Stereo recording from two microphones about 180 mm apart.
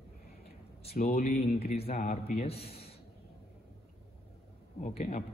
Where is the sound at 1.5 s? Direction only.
35° left (ahead or behind).